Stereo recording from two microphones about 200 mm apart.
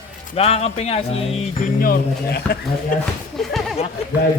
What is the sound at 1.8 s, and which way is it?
Speech, 50° left (ahead or behind).